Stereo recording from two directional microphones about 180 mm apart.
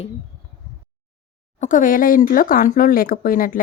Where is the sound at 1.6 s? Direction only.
45° left (ahead or behind).